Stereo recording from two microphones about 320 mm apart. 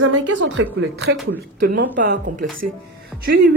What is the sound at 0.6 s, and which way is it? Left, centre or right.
A woman's voice, right.